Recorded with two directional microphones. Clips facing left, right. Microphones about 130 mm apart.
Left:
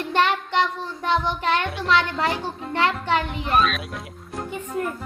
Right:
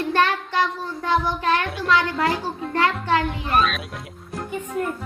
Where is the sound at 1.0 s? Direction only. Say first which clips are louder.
Right 1 dB; 20° left (ahead or behind).